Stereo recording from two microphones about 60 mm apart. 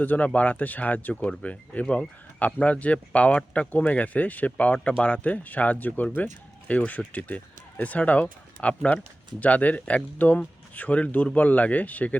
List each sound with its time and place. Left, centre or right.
0.0 s speech: left